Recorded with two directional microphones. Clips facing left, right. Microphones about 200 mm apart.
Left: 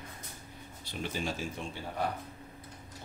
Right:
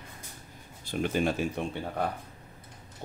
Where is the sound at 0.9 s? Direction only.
55° right (ahead or behind).